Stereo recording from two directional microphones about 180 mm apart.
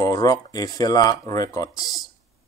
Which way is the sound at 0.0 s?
20° left (ahead or behind).